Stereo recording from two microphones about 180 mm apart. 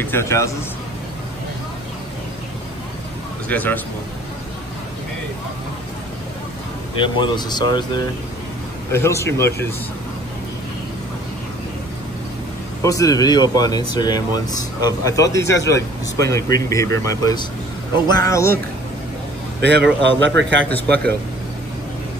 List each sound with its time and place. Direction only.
0.0 s speech: 15° left (ahead or behind)
3.4 s speech: 10° left (ahead or behind)
7.0 s speech: 25° left (ahead or behind)
8.9 s speech: 15° left (ahead or behind)
12.8 s speech: 20° left (ahead or behind)
19.6 s a man's voice: 70° right (ahead or behind)
20.6 s speech: 10° left (ahead or behind)